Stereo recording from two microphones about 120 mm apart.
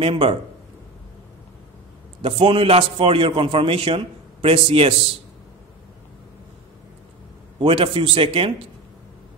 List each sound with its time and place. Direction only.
0.0 s a man's voice: 50° right (ahead or behind)
2.2 s a man's voice: 50° right (ahead or behind)
7.5 s a man's voice: 50° right (ahead or behind)